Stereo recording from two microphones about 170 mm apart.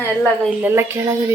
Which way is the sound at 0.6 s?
15° right (ahead or behind).